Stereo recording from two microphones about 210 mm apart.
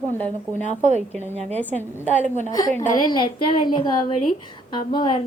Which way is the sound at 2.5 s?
20° left (ahead or behind).